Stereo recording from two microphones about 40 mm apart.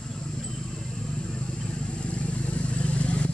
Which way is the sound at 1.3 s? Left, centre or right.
Left.